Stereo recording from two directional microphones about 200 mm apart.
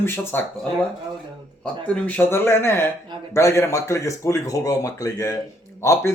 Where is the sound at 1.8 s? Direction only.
5° left (ahead or behind).